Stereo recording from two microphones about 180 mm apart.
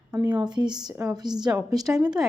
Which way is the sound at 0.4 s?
25° right (ahead or behind).